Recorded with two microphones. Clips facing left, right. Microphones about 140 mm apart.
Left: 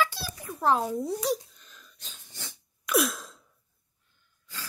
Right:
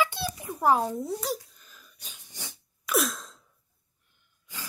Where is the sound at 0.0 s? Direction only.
20° right (ahead or behind).